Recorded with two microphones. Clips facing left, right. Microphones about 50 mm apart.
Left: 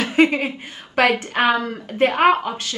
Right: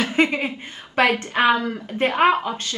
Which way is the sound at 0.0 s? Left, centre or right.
Centre.